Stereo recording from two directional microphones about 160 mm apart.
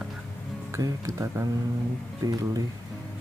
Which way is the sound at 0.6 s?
20° right (ahead or behind).